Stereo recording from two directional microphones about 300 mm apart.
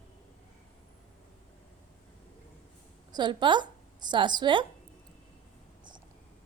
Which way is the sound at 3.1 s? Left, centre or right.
Centre.